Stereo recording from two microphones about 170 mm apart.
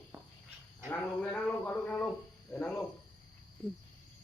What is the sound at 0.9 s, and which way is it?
Music, 10° left (ahead or behind).